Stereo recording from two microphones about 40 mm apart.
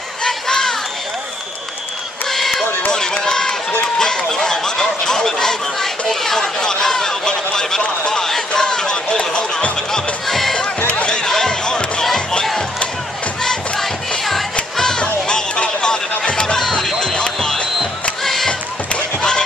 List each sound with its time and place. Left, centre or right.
0.2 s a sound: centre
2.2 s run: centre
4.0 s a sound: centre
8.1 s music: centre
10.2 s music: centre
10.9 s music: left
12.0 s music: centre
13.4 s music: centre
15.0 s music: left
18.2 s music: centre
18.5 s basketball bounce: left